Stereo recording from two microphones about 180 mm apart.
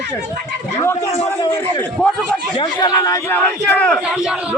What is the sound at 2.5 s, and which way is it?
Speech, 20° left (ahead or behind).